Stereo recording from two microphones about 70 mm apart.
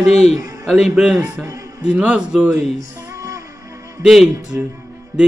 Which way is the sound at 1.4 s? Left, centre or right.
Right.